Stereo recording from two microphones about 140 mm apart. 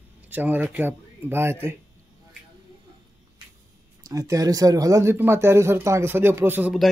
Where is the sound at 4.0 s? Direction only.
25° right (ahead or behind).